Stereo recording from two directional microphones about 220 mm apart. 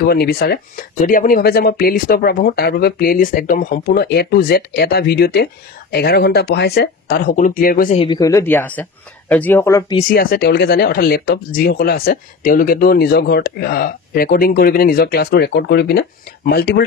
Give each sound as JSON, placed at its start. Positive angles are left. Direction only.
{"t": 0.0, "sound": "speech", "side_deg": 45}
{"t": 8.0, "sound": "speech", "side_deg": 15}
{"t": 10.0, "sound": "speech", "side_deg": 40}